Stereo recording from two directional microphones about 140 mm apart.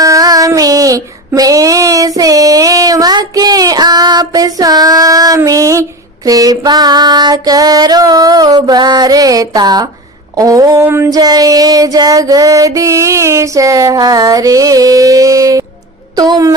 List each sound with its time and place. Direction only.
0.0 s child singing: 25° right (ahead or behind)
6.2 s music: 25° right (ahead or behind)
16.1 s a woman's voice: 30° right (ahead or behind)